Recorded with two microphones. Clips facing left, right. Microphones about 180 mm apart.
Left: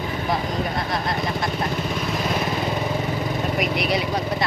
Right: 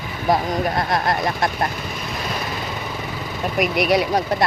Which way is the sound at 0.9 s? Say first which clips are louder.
Right 4 dB; 55° right (ahead or behind).